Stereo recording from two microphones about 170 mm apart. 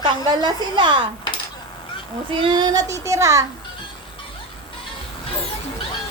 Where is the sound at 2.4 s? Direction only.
25° right (ahead or behind).